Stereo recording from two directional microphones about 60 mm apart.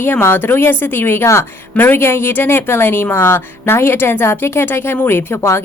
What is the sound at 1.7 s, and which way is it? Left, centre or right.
Speech, left.